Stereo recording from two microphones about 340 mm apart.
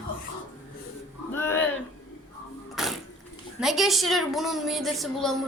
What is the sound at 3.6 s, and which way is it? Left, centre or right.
Speech, centre.